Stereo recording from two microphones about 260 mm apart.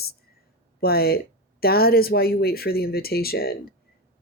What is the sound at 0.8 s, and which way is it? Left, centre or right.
Speech, left.